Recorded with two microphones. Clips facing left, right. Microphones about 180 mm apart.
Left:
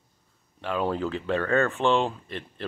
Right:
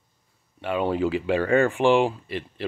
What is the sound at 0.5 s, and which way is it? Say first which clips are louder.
Speech: right 3 dB; 5° right (ahead or behind).